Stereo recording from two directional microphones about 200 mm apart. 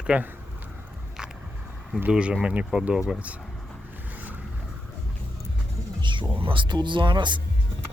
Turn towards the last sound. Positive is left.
turn(degrees=-25)  # may be behind; listen again after turning